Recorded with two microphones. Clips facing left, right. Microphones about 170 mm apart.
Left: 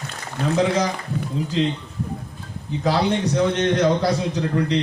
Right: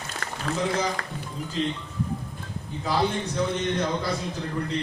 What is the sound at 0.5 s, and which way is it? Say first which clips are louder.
A man's voice: left 6 dB; 80° left.